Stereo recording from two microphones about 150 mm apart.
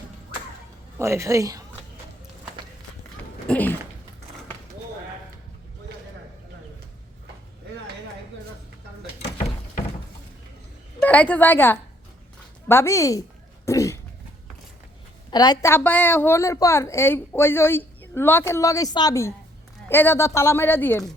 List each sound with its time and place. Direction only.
0.9 s a woman's voice: 20° right (ahead or behind)
3.4 s speech: 10° left (ahead or behind)
11.0 s a woman's voice: 10° left (ahead or behind)
13.7 s cough: 20° left (ahead or behind)
15.3 s a woman's voice: 25° left (ahead or behind)
15.7 s a woman's voice: 10° left (ahead or behind)